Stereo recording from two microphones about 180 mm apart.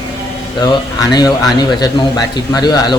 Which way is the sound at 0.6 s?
20° left (ahead or behind).